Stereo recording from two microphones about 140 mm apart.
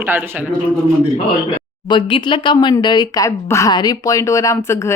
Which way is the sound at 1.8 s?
35° left (ahead or behind).